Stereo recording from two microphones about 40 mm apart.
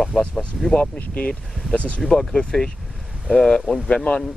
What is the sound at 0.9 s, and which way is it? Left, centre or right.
Speech, left.